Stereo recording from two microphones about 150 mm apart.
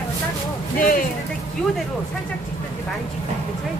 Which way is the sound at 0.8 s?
65° left (ahead or behind).